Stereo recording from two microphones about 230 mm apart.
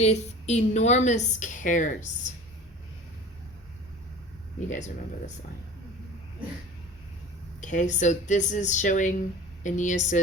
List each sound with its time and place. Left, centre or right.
0.0 s a woman's voice: left
4.7 s a woman's voice: left
7.6 s a woman's voice: left